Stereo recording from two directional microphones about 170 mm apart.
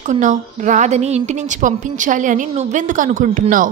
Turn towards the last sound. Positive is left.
turn(degrees=-50)  # may be behind; listen again after turning